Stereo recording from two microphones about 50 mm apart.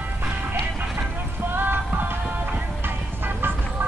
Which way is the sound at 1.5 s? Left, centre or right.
Right.